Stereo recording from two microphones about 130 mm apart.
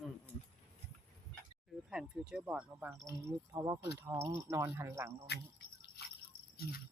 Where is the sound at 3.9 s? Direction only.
15° right (ahead or behind).